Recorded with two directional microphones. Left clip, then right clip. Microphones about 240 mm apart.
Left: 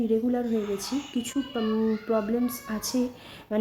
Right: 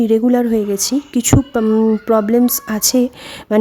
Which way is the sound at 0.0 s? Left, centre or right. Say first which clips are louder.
Right 12 dB; right.